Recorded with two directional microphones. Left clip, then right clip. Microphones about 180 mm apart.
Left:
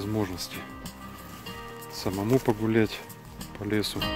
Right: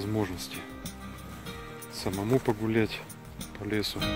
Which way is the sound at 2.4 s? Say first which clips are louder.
Left 3 dB; 40° left (ahead or behind).